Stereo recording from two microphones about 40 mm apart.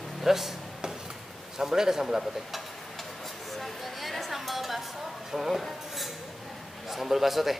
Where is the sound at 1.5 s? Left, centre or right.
Centre.